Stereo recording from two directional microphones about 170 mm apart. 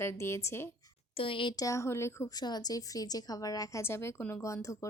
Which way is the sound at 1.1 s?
30° left (ahead or behind).